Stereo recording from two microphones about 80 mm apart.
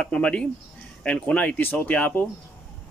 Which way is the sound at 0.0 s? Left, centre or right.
Centre.